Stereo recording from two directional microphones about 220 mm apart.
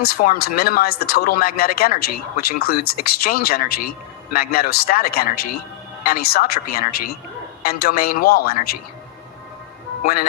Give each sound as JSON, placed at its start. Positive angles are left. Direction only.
{"t": 0.0, "sound": "a man's voice", "side_deg": 40}
{"t": 10.0, "sound": "a man's voice", "side_deg": 40}